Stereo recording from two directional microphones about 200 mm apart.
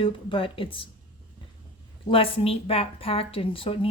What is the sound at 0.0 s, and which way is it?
Speech, 25° left (ahead or behind).